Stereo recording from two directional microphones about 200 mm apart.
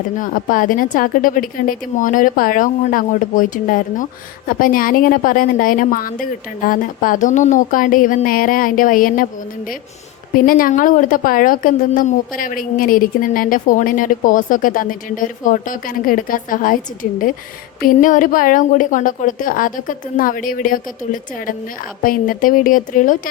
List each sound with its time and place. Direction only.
0.2 s a woman's voice: 45° left (ahead or behind)
10.3 s a woman's voice: 45° left (ahead or behind)